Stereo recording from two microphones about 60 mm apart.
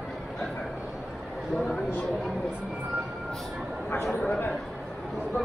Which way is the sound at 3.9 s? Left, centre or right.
Left.